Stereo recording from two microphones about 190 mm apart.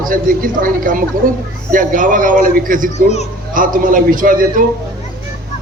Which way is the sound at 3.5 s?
45° right (ahead or behind).